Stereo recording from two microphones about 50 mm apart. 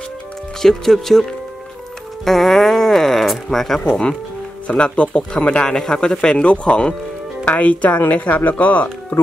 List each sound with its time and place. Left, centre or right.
0.6 s speech: centre
2.2 s a sound: centre
3.8 s speech: centre
7.4 s speech: left